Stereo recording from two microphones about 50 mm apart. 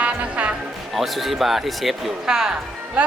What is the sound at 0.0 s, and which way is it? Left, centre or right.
Music, right.